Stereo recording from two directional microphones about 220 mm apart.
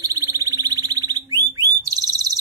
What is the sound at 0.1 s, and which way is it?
Sine wave, 15° right (ahead or behind).